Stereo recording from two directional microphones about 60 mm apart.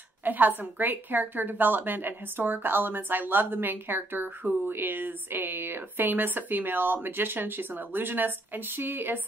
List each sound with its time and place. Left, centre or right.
0.2 s a woman's voice: right